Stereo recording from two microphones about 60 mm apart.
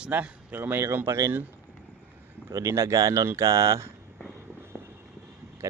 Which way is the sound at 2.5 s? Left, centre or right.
Right.